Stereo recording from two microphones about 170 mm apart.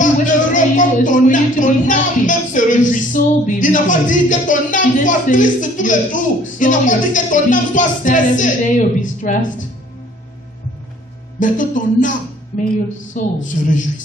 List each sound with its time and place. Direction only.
0.0 s speech: 50° left (ahead or behind)
11.3 s speech: 50° left (ahead or behind)